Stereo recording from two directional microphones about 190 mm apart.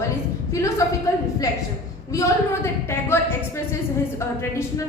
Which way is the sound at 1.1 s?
15° left (ahead or behind).